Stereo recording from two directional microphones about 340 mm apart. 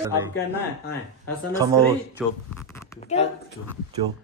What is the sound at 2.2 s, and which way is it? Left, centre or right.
Speech, centre.